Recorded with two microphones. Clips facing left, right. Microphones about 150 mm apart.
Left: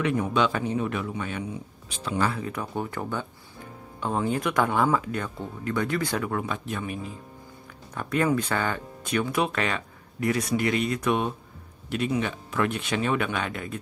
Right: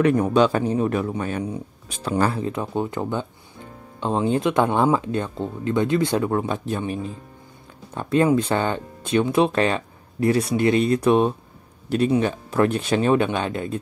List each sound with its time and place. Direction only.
0.0 s speech: 40° right (ahead or behind)
2.4 s speech: 25° right (ahead or behind)